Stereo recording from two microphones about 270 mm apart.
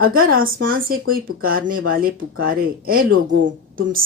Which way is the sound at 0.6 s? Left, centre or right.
Right.